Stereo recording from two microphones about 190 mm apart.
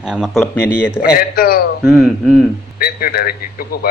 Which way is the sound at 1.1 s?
50° left (ahead or behind).